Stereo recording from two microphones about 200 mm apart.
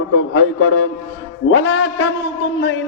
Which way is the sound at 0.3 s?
80° left.